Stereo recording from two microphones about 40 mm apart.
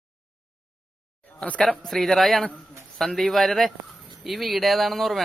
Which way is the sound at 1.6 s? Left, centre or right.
Centre.